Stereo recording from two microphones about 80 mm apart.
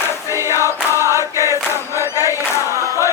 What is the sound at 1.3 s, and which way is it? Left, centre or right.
Choir, right.